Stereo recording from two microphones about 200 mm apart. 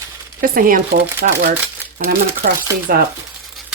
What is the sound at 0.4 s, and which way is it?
Speech, 45° right (ahead or behind).